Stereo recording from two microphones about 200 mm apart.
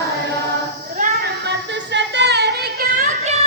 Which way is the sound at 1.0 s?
50° right (ahead or behind).